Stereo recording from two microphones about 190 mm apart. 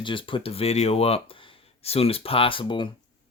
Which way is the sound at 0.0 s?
25° left (ahead or behind).